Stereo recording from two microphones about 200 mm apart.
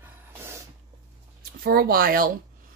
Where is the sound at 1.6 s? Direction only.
50° right (ahead or behind).